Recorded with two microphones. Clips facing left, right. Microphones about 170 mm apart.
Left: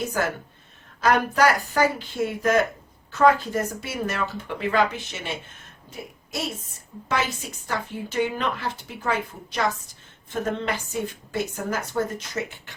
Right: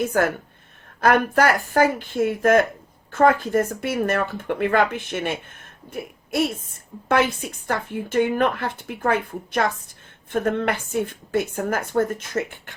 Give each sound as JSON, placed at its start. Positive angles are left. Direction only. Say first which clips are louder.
{"t": 0.0, "sound": "a woman's voice", "louder": "right 5 dB", "side_deg": -55}